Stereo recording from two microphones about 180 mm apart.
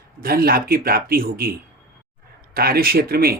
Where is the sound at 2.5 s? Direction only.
55° right (ahead or behind).